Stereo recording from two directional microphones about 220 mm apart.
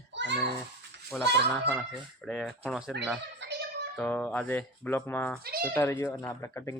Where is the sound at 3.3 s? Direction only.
50° right (ahead or behind).